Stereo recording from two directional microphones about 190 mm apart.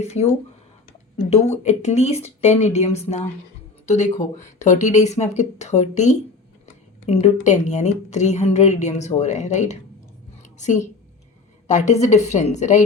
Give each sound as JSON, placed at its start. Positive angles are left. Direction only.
{"t": 0.0, "sound": "a woman's voice", "side_deg": 35}